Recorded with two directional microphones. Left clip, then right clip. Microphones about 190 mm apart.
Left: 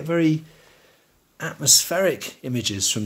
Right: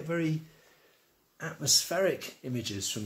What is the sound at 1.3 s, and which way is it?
Speech, 35° left (ahead or behind).